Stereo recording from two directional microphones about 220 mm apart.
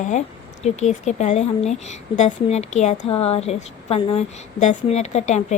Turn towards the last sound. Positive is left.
turn(degrees=30)  # may be behind; listen again after turning